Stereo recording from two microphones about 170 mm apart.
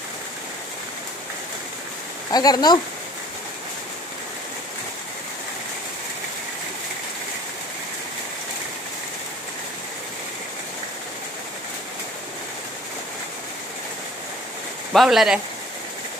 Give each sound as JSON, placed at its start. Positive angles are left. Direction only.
{"t": 2.3, "sound": "speech", "side_deg": 25}
{"t": 14.9, "sound": "speech", "side_deg": 0}